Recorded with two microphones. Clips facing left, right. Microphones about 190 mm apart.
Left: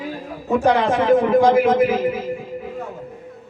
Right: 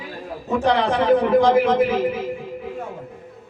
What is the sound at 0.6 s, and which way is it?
Speech, 45° left (ahead or behind).